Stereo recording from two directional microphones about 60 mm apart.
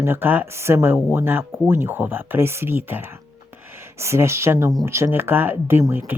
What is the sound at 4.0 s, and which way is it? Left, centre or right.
Speech, right.